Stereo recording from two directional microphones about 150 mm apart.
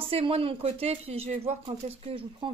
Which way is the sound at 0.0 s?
40° right (ahead or behind).